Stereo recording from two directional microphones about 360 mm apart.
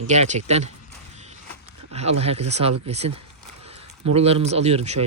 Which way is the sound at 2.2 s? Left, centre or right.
Centre.